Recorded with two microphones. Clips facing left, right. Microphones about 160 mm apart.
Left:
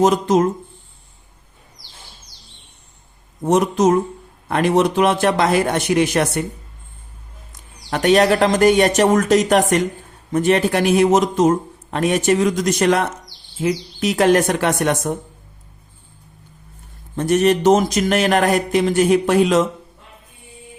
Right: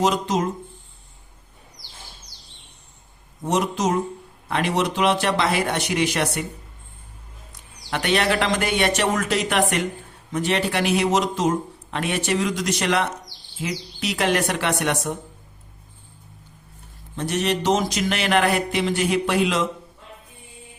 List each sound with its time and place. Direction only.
0.0 s a man's voice: 50° left (ahead or behind)
3.4 s a man's voice: 50° left (ahead or behind)
7.9 s a man's voice: 40° left (ahead or behind)
17.2 s a man's voice: 50° left (ahead or behind)